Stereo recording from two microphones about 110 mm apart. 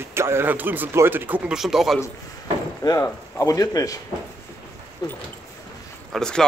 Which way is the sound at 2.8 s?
30° left (ahead or behind).